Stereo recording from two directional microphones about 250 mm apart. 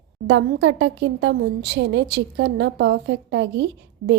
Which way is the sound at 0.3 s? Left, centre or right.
Right.